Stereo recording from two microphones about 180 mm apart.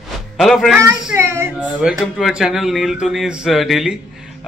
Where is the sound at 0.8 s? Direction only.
15° right (ahead or behind).